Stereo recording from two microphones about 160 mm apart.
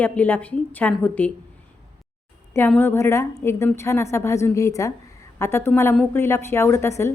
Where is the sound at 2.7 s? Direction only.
15° left (ahead or behind).